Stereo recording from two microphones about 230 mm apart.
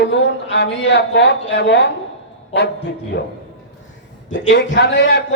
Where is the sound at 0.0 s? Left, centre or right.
Left.